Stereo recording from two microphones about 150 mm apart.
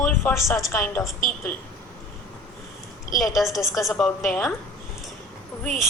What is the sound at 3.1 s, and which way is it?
Speech, centre (ahead or behind).